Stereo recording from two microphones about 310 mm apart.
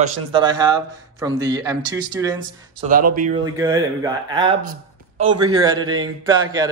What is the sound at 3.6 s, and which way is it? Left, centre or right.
Speech, centre.